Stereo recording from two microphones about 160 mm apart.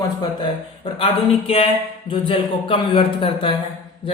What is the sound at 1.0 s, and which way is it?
A man's voice, 40° left (ahead or behind).